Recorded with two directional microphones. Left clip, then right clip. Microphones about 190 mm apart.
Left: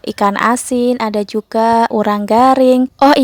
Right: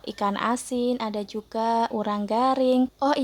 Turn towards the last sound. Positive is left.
turn(degrees=40)  # may be behind; listen again after turning